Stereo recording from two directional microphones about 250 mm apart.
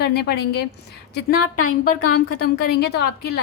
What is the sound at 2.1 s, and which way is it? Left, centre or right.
A woman's voice, left.